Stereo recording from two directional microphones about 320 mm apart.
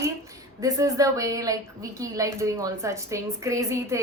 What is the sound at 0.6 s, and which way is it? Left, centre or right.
A woman's voice, centre.